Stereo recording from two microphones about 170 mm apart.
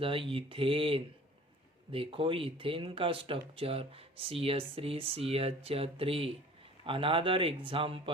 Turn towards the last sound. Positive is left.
turn(degrees=-30)  # may be behind; listen again after turning